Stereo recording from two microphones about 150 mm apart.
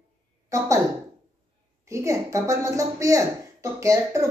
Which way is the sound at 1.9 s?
20° right (ahead or behind).